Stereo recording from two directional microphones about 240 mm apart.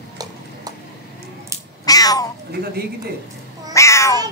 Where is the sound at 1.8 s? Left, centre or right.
Centre.